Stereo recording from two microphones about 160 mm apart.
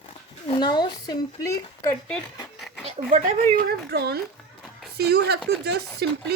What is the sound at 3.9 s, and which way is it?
Speech, 85° right.